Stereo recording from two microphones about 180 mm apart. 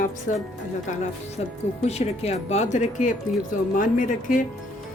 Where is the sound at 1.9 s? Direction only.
35° left (ahead or behind).